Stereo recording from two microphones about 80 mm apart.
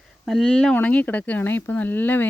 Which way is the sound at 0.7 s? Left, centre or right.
Centre.